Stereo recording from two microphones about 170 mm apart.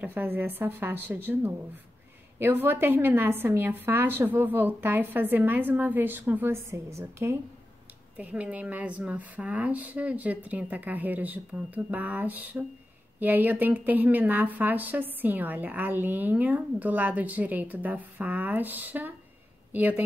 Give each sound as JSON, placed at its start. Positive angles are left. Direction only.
{"t": 0.0, "sound": "speech", "side_deg": -10}